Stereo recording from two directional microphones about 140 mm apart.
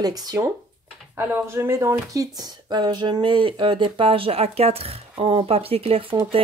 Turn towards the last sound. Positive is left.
turn(degrees=-40)  # may be behind; listen again after turning